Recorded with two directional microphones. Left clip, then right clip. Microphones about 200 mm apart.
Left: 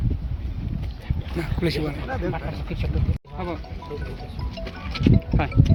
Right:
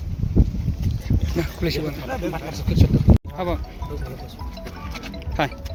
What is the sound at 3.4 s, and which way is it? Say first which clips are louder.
Speech: even; 40° right (ahead or behind).